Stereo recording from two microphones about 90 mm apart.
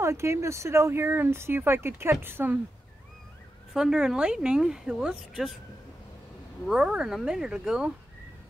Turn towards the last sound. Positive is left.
turn(degrees=-10)  # may be behind; listen again after turning